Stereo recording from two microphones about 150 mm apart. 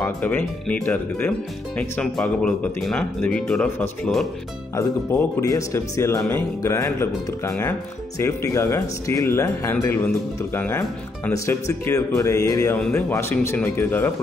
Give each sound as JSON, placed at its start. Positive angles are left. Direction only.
{"t": 0.0, "sound": "speech", "side_deg": 10}
{"t": 4.7, "sound": "speech", "side_deg": 20}